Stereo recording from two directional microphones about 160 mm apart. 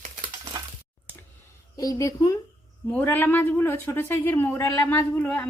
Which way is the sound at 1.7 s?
20° left (ahead or behind).